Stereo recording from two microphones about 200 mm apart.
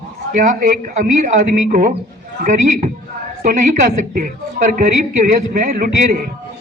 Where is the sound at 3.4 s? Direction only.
40° right (ahead or behind).